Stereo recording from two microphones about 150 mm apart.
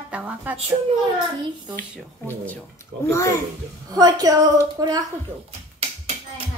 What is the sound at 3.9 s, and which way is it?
A woman's voice, 25° right (ahead or behind).